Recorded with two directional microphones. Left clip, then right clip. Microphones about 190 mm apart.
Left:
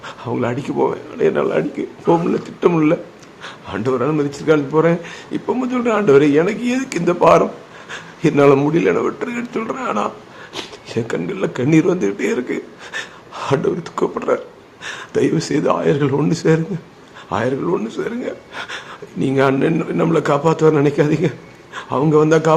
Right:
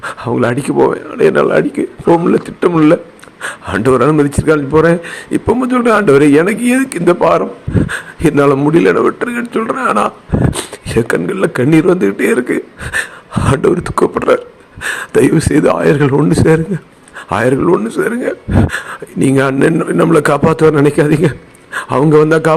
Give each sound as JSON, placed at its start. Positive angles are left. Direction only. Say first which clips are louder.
{"t": 0.0, "sound": "a man's voice", "louder": "right 7 dB", "side_deg": -30}